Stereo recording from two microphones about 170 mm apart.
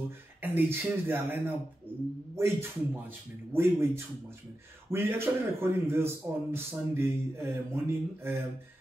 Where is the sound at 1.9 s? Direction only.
10° right (ahead or behind).